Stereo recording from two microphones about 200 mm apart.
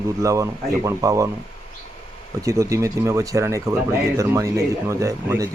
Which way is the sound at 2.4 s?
15° right (ahead or behind).